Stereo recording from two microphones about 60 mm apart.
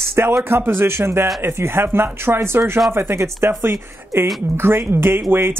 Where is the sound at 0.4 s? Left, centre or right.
Right.